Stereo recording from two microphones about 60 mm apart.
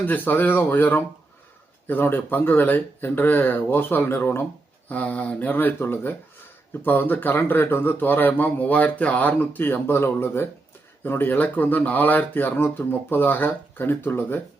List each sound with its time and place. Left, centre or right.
0.0 s speech: left
4.9 s speech: left